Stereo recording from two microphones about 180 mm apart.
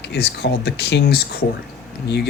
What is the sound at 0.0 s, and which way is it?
Speech, 70° left (ahead or behind).